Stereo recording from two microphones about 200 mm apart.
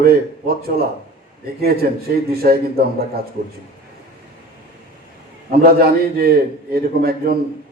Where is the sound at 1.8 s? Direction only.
50° right (ahead or behind).